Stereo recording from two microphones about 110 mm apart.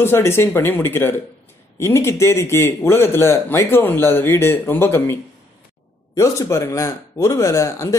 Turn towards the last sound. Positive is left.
turn(degrees=25)  # may be behind; listen again after turning